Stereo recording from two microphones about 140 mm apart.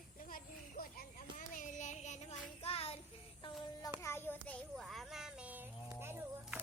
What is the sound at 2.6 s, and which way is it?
Child singing, 45° left (ahead or behind).